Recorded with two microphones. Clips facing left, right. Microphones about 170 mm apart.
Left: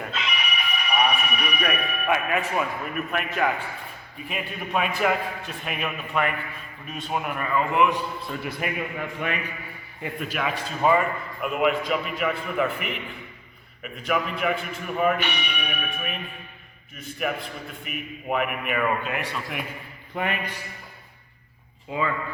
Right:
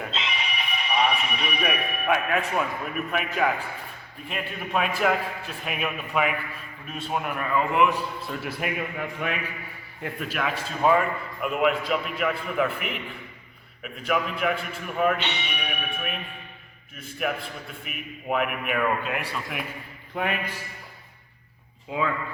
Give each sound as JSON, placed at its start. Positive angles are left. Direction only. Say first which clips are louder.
{"t": 0.1, "sound": "music", "louder": "left 1 dB", "side_deg": -25}
{"t": 1.2, "sound": "speech", "louder": "left 1 dB", "side_deg": -25}
{"t": 1.6, "sound": "a man's voice", "louder": "even", "side_deg": 0}
{"t": 21.8, "sound": "speech", "louder": "even", "side_deg": 0}